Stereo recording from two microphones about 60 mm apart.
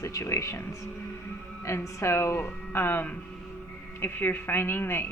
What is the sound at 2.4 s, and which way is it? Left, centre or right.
A woman's voice, left.